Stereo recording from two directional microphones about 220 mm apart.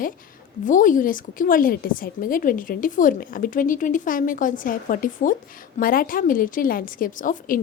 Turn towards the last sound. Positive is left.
turn(degrees=35)  # may be behind; listen again after turning